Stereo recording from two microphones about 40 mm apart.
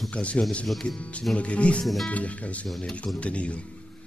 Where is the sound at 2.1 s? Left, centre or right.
Left.